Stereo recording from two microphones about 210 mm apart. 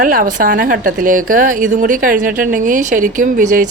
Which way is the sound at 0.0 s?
40° right (ahead or behind).